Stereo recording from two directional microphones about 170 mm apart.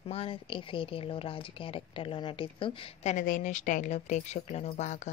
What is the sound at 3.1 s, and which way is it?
Speech, 50° left (ahead or behind).